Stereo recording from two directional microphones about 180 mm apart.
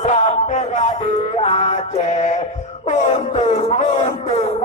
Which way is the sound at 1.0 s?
35° left (ahead or behind).